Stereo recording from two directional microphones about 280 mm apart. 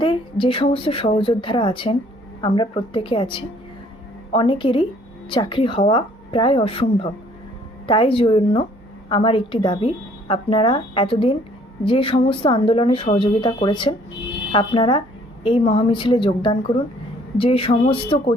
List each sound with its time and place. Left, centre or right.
0.0 s a woman's voice: centre